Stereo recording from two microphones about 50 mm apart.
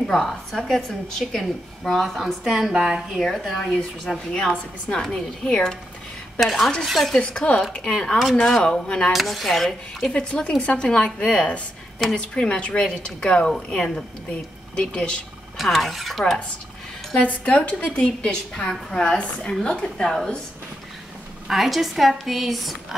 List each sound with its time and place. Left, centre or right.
0.0 s a woman's voice: centre
3.2 s a woman's voice: centre
6.4 s a woman's voice: centre
7.2 s a woman's voice: left
9.1 s a woman's voice: centre
10.1 s a woman's voice: left
15.5 s a woman's voice: centre
17.3 s a woman's voice: left
21.5 s a woman's voice: centre